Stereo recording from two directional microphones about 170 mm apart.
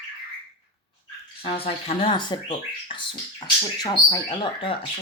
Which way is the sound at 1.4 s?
35° left (ahead or behind).